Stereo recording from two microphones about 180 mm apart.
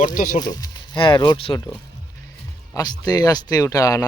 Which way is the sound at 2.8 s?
20° left (ahead or behind).